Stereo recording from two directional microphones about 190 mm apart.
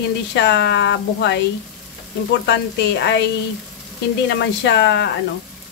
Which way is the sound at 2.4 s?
65° left (ahead or behind).